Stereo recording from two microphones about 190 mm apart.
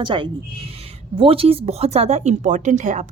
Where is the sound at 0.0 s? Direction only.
25° right (ahead or behind).